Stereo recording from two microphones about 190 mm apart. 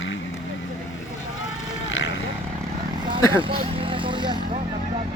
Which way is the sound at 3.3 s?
25° right (ahead or behind).